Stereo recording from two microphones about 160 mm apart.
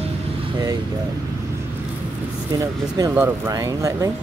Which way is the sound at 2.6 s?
20° right (ahead or behind).